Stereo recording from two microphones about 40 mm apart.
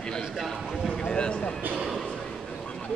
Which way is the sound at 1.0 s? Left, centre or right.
Left.